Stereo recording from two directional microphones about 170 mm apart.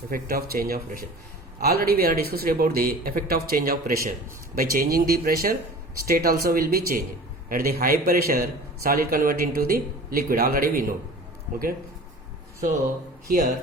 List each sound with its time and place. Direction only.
0.1 s a man's voice: 60° right (ahead or behind)
13.2 s a man's voice: 55° right (ahead or behind)